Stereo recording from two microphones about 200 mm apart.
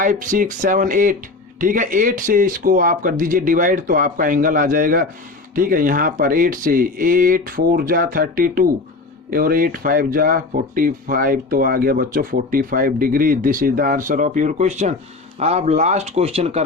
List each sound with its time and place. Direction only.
0.0 s speech: 40° right (ahead or behind)